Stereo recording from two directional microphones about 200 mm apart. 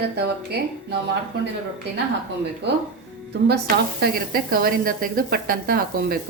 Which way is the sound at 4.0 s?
50° right (ahead or behind).